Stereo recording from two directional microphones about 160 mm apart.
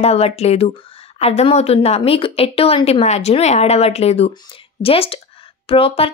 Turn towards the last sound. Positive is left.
turn(degrees=35)  # may be behind; listen again after turning